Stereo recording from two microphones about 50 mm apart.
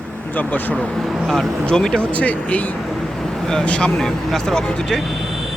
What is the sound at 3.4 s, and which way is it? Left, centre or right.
Speech, centre.